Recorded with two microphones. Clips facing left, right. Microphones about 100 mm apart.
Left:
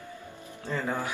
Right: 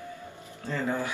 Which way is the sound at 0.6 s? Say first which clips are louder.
Right 1 dB; 15° left (ahead or behind).